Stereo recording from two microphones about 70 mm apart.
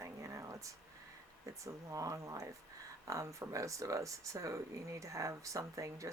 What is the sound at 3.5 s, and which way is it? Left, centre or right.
Speech, right.